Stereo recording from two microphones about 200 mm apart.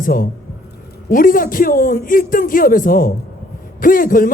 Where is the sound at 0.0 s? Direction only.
45° left (ahead or behind).